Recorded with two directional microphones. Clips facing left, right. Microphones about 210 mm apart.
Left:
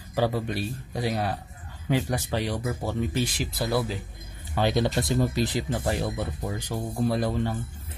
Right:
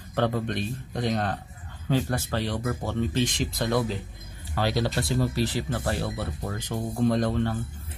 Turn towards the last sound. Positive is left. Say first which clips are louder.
# right 2 dB
turn(degrees=10)  # may be behind; listen again after turning